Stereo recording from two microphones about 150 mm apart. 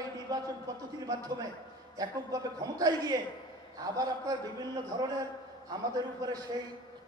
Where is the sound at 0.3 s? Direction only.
25° right (ahead or behind).